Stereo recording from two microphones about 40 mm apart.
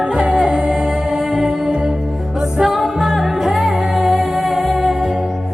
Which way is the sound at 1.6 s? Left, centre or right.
Right.